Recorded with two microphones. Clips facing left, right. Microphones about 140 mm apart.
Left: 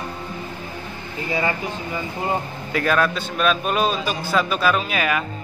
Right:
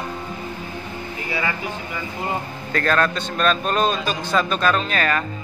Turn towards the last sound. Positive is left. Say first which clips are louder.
# even
turn(degrees=10)  # may be behind; listen again after turning